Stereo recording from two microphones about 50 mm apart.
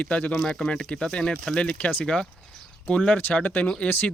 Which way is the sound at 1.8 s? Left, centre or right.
Left.